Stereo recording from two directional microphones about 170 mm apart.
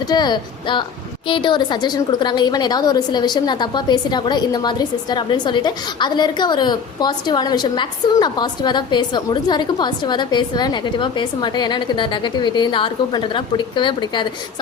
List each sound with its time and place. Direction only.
0.1 s a woman's voice: 25° left (ahead or behind)